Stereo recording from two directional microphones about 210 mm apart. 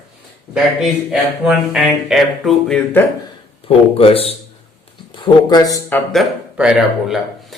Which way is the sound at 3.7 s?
25° left (ahead or behind).